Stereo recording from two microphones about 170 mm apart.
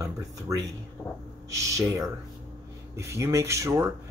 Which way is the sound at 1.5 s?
20° right (ahead or behind).